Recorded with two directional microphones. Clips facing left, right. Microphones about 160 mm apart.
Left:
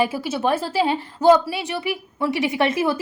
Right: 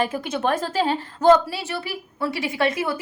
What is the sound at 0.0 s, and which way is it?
A woman's voice, 5° left (ahead or behind).